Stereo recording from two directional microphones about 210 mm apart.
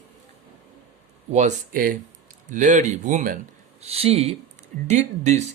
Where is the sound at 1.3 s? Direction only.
35° right (ahead or behind).